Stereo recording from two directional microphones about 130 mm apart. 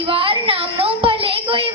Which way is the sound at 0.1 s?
45° right (ahead or behind).